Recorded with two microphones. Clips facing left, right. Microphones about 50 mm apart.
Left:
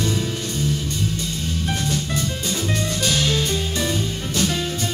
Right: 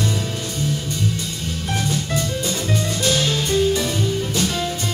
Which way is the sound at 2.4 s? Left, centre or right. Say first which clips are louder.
Right 1 dB; centre.